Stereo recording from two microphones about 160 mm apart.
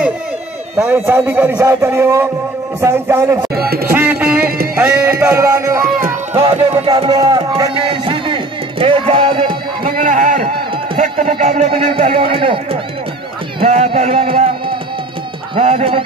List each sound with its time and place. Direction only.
0.7 s a man's voice: 15° right (ahead or behind)
3.5 s music: 75° right (ahead or behind)
3.9 s music: 10° right (ahead or behind)
6.4 s music: 35° right (ahead or behind)
9.8 s a sound: 60° right (ahead or behind)
11.0 s speech: 55° right (ahead or behind); by 12.5 s 35° right (ahead or behind)
13.6 s a sound: 45° right (ahead or behind)
15.5 s speech: 35° right (ahead or behind)